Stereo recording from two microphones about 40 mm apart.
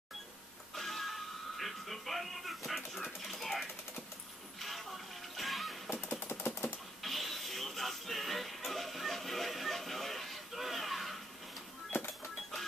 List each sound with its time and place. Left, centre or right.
0.7 s music: centre
5.9 s engine: left
7.0 s music: centre